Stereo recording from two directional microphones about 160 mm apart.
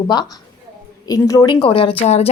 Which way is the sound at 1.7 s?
35° left (ahead or behind).